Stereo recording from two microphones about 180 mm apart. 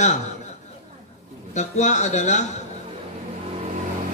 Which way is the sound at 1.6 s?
40° left (ahead or behind).